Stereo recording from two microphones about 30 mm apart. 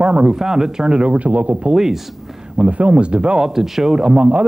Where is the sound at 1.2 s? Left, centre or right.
Right.